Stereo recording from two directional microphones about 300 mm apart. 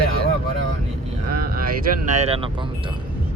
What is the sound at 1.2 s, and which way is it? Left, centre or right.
Vehicle, right.